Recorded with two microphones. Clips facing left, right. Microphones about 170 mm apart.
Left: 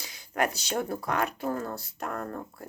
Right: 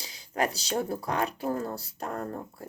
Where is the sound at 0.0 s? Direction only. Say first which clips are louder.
Even; 30° right (ahead or behind).